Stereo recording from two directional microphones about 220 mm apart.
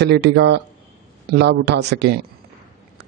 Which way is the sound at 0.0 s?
50° right (ahead or behind).